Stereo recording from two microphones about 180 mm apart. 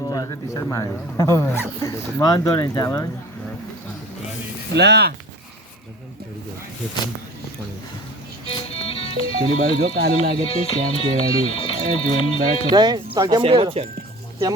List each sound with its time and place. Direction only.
0.1 s speech: 20° left (ahead or behind)
4.7 s speech: 70° right (ahead or behind)
8.4 s music: 30° left (ahead or behind)
9.6 s speech: 60° right (ahead or behind)
10.5 s speech: 30° left (ahead or behind)
12.7 s speech: 20° right (ahead or behind)